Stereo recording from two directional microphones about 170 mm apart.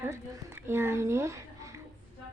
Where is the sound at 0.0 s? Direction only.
15° right (ahead or behind).